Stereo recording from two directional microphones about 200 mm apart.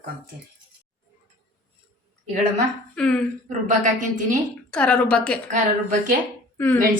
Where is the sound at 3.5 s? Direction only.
40° right (ahead or behind).